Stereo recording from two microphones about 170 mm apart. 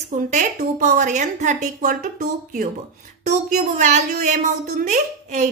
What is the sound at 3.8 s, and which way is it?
Speech, 45° right (ahead or behind).